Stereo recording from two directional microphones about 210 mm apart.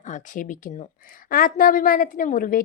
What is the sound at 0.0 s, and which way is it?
A woman's voice, 35° left (ahead or behind).